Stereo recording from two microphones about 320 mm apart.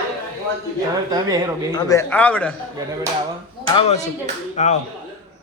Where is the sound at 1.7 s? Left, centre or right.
Centre.